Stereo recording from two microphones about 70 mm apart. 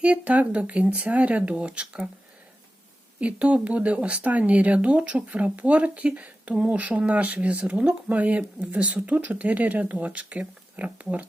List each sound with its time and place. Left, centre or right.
0.0 s speech: right
3.2 s speech: centre